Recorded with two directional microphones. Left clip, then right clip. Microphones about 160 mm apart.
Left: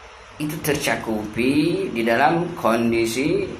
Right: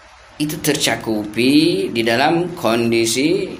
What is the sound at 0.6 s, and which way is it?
Speech, 50° right (ahead or behind).